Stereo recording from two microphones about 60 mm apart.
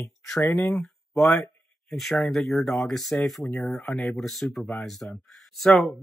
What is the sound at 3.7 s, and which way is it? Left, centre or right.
Speech, left.